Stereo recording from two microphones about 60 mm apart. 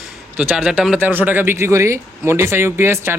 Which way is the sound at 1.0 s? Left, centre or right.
Right.